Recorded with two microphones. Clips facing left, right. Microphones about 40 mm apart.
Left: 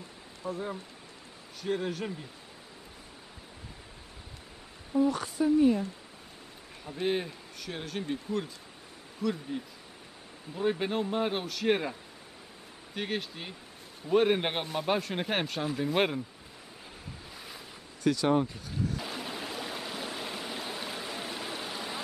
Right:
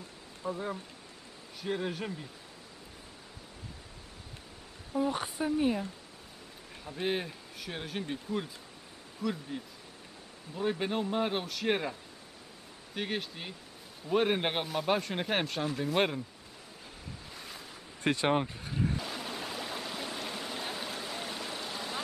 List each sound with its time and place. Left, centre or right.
0.5 s speech: centre
4.9 s speech: centre
6.8 s speech: centre
17.3 s waves: centre
18.0 s speech: right
18.9 s stream: centre